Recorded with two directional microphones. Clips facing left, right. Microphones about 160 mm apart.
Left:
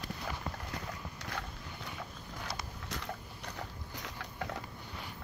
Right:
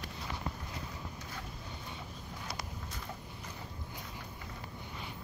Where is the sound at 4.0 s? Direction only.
75° left (ahead or behind).